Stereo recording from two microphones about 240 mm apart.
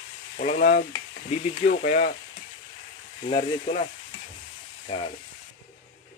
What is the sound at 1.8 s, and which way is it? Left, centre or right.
Speech, left.